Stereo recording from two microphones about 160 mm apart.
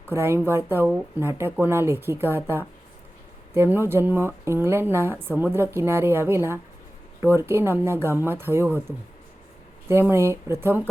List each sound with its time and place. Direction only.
0.1 s a woman's voice: 15° right (ahead or behind)
9.9 s a woman's voice: 15° right (ahead or behind)